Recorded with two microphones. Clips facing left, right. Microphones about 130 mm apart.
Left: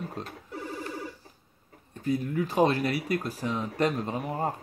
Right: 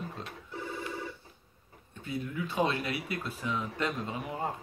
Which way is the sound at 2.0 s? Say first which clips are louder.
Left 7 dB; 40° left (ahead or behind).